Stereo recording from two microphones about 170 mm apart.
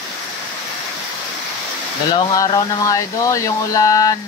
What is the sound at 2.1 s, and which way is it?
Speech, 25° left (ahead or behind).